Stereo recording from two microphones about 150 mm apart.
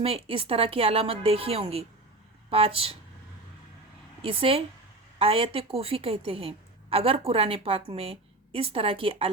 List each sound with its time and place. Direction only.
0.0 s a woman's voice: 40° right (ahead or behind)
4.2 s a woman's voice: 40° right (ahead or behind)